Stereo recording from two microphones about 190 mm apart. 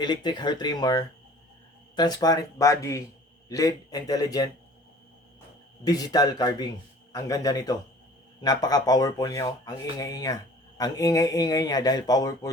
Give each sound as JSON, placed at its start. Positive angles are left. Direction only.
{"t": 0.0, "sound": "speech", "side_deg": 20}
{"t": 5.8, "sound": "speech", "side_deg": 20}